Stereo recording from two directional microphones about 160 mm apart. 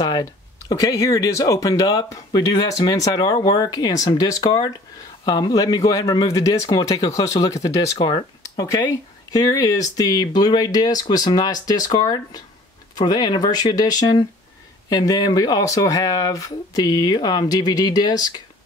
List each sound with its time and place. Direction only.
0.0 s speech: 25° left (ahead or behind)
8.4 s a sound: 20° left (ahead or behind)
9.3 s speech: 25° left (ahead or behind)